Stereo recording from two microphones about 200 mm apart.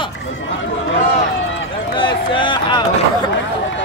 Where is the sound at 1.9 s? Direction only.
25° left (ahead or behind).